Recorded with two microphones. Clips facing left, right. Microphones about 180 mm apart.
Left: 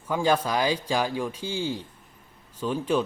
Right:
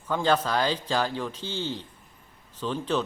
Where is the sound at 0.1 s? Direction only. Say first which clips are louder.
Left 1 dB; 10° left (ahead or behind).